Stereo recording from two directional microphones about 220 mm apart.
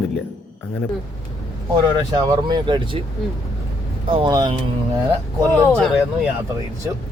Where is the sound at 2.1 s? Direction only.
20° right (ahead or behind).